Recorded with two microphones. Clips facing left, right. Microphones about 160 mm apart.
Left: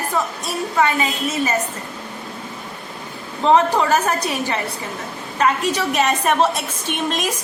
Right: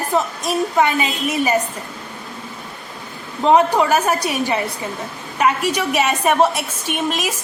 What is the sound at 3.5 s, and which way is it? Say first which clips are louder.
A woman's voice: right 1 dB; 10° right (ahead or behind).